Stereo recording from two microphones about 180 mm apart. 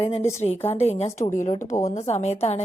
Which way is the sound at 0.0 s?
30° left (ahead or behind).